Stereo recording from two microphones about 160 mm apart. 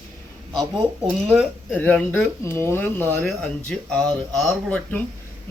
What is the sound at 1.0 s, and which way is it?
Speech, 5° right (ahead or behind).